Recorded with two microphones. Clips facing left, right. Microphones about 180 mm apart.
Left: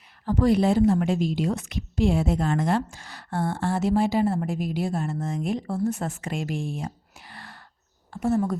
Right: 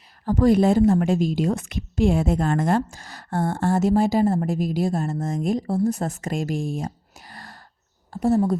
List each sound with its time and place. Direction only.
0.3 s a woman's voice: 45° right (ahead or behind)